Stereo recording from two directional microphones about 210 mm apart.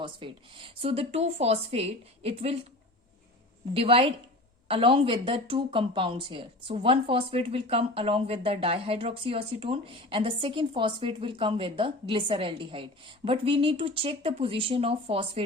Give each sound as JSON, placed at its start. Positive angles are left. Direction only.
{"t": 0.0, "sound": "speech", "side_deg": -25}
{"t": 3.8, "sound": "speech", "side_deg": -25}